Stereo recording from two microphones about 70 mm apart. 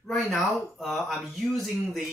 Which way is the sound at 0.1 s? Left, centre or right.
Centre.